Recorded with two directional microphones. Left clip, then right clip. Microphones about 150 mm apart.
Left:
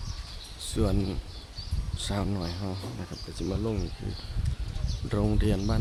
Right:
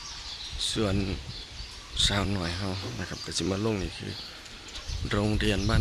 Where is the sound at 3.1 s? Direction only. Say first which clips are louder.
Right 5 dB; 5° right (ahead or behind).